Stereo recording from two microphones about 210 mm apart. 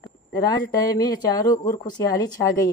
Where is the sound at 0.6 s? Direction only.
15° left (ahead or behind).